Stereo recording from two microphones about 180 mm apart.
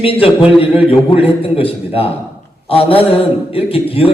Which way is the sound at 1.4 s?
30° left (ahead or behind).